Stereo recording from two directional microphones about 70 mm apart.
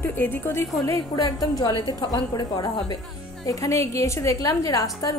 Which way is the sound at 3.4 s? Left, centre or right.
Left.